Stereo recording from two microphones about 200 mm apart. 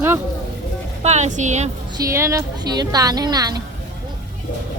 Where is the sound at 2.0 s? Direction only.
15° right (ahead or behind).